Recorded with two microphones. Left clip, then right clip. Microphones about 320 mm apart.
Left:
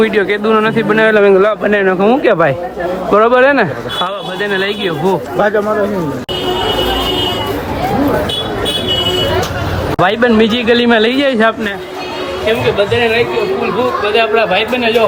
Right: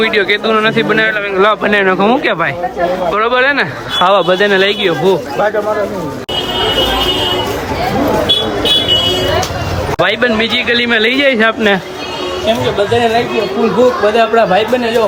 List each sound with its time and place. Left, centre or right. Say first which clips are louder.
0.0 s a man's voice: even; centre
10.0 s a man's voice: left 2 dB; centre
14.2 s speech: even; centre